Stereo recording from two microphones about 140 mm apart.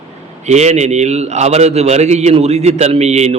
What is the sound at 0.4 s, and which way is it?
A man's voice, 55° right (ahead or behind).